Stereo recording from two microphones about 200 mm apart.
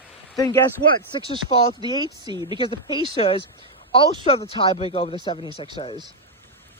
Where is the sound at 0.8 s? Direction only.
90° right.